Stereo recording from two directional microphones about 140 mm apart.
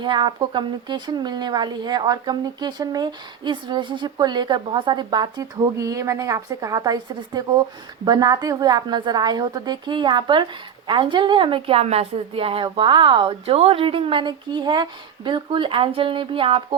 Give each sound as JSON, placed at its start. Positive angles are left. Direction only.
{"t": 0.0, "sound": "a woman's voice", "side_deg": -35}